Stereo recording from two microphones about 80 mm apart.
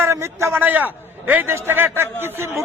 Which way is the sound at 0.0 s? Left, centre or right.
Right.